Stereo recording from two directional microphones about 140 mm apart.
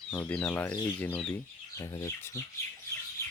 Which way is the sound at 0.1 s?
10° left (ahead or behind).